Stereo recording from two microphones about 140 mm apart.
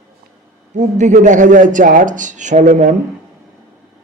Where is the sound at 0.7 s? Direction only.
60° right (ahead or behind).